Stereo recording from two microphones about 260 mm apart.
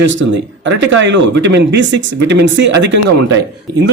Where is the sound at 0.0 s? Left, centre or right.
Right.